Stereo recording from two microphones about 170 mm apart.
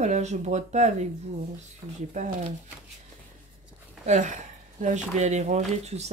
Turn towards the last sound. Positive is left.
turn(degrees=-40)  # may be behind; listen again after turning